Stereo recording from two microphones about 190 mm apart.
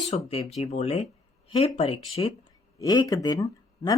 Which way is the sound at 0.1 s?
30° left (ahead or behind).